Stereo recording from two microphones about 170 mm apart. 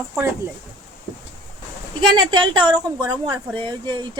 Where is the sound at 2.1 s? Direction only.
25° right (ahead or behind).